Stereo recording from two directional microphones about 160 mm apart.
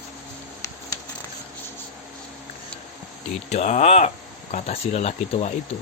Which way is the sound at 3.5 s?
45° left (ahead or behind).